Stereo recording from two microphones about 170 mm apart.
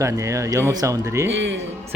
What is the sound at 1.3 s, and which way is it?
Speech, 90° right.